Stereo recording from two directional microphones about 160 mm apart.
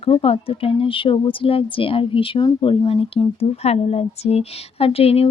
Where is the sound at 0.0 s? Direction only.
35° left (ahead or behind).